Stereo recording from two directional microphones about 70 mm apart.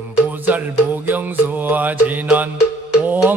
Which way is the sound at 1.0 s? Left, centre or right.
Right.